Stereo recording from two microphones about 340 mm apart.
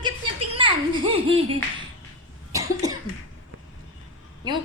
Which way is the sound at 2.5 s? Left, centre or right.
Centre.